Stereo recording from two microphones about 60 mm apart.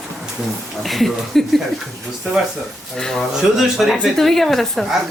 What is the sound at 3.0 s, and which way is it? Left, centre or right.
Speech, centre.